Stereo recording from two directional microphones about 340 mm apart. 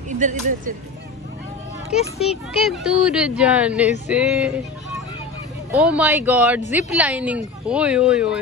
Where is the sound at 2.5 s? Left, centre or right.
Centre.